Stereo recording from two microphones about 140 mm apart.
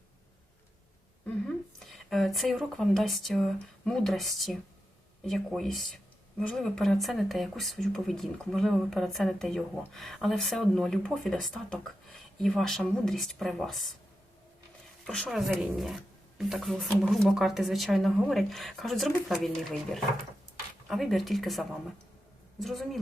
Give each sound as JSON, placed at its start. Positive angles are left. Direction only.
{"t": 1.9, "sound": "speech", "side_deg": 0}
{"t": 15.0, "sound": "speech", "side_deg": 5}